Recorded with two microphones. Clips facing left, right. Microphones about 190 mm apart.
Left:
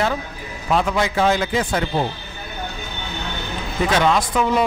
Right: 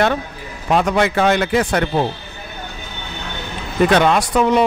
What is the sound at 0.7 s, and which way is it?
A man's voice, 70° right (ahead or behind).